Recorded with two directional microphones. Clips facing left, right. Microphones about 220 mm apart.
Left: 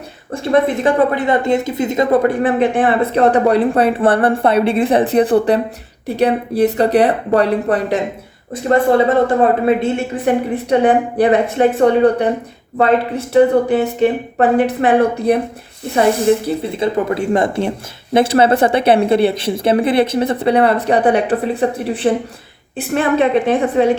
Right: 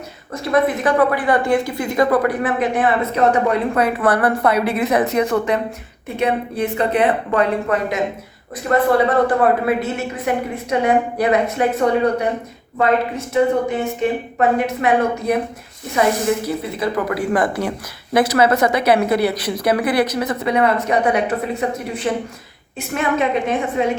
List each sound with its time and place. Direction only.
0.4 s a woman's voice: 30° left (ahead or behind)